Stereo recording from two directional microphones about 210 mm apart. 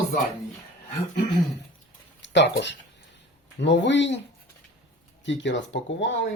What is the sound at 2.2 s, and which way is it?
Speech, 55° left (ahead or behind).